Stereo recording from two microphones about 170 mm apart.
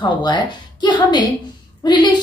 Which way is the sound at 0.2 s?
25° left (ahead or behind).